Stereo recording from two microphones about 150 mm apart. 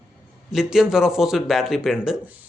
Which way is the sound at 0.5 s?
5° right (ahead or behind).